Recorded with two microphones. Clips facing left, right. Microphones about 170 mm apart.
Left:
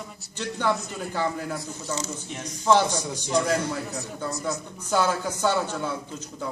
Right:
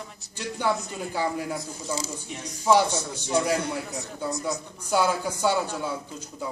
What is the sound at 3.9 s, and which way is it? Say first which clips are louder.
Speech: left 1 dB; centre (ahead or behind).